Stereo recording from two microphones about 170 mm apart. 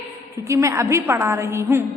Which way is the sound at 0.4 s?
15° right (ahead or behind).